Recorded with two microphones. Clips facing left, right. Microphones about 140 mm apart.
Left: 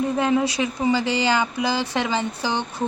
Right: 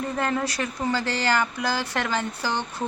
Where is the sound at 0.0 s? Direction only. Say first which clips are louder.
Left 6 dB; 10° left (ahead or behind).